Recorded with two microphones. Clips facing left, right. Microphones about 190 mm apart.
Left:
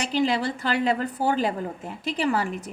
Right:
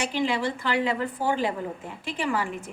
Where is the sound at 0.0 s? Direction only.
40° left (ahead or behind).